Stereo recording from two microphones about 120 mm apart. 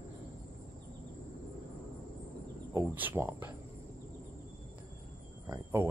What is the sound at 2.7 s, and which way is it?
Speech, 20° right (ahead or behind).